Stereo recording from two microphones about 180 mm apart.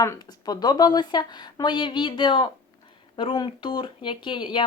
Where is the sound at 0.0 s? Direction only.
20° left (ahead or behind).